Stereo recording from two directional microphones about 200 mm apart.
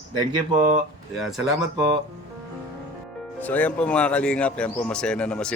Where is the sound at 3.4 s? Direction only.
5° left (ahead or behind).